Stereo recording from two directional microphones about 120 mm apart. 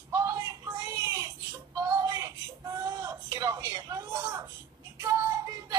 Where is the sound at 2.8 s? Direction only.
25° right (ahead or behind).